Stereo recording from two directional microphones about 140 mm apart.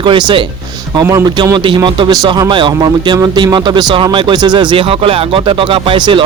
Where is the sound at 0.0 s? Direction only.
35° right (ahead or behind).